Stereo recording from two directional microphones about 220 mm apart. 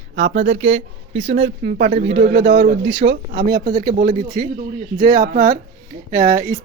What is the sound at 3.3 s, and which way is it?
Speech, 20° right (ahead or behind).